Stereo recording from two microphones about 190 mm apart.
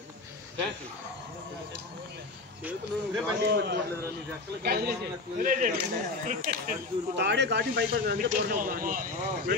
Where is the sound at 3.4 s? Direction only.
60° right (ahead or behind); by 6.8 s 45° right (ahead or behind).